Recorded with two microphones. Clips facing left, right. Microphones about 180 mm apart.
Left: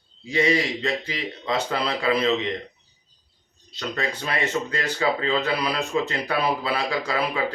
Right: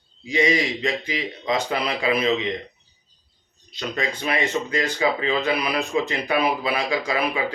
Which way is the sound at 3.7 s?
15° right (ahead or behind).